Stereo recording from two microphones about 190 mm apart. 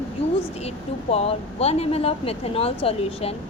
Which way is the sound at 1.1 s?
30° left (ahead or behind).